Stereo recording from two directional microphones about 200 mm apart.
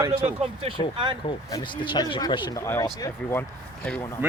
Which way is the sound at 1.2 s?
25° left (ahead or behind).